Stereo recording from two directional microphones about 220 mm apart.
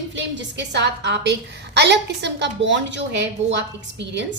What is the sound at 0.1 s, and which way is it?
A woman's voice, 55° right (ahead or behind).